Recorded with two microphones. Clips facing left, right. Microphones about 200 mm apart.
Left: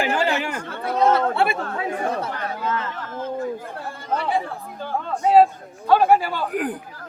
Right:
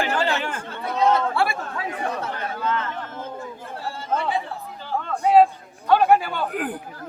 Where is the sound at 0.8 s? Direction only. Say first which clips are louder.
Left 2 dB; 50° left (ahead or behind).